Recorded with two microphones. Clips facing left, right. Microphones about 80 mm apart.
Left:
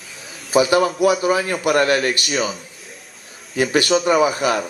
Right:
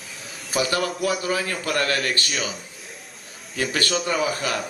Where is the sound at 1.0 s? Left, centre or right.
Centre.